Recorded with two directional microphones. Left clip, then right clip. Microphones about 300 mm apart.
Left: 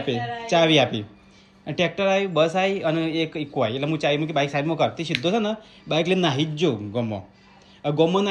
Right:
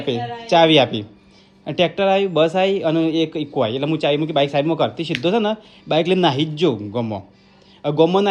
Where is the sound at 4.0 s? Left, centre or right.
Centre.